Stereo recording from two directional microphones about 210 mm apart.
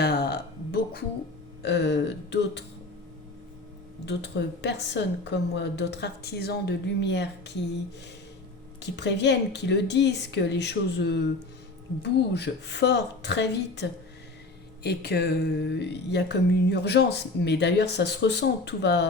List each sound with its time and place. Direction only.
0.0 s a sound: 50° left (ahead or behind)
1.6 s speech: 55° left (ahead or behind)
4.0 s speech: 55° left (ahead or behind)
8.8 s speech: 55° left (ahead or behind)
14.8 s speech: 50° left (ahead or behind)